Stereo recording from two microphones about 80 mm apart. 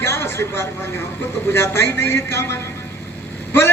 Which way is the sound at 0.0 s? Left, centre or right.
Left.